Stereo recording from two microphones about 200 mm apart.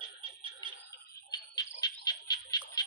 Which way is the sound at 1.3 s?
20° left (ahead or behind).